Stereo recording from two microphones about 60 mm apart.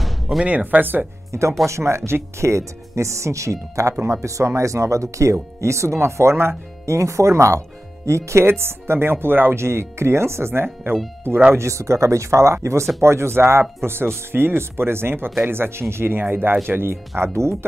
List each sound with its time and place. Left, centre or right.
0.0 s music: centre
0.5 s speech: right
1.3 s speech: right
11.5 s speech: right